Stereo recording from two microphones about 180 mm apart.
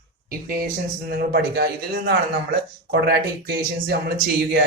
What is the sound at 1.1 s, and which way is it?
Speech, 60° right (ahead or behind).